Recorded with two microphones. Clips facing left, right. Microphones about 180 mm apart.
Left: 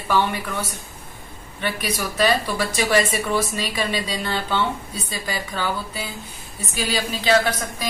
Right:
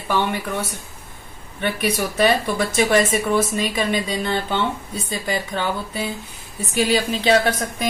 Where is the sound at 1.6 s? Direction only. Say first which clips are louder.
Right 4 dB; 25° right (ahead or behind).